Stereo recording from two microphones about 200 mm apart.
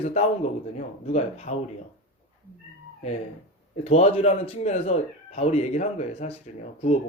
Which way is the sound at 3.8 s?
30° left (ahead or behind).